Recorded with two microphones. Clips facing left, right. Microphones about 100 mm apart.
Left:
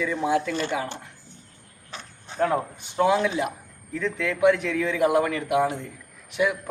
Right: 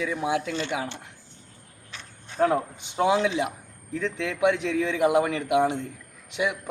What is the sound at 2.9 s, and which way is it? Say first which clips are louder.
A man's voice: left 1 dB; 20° right (ahead or behind).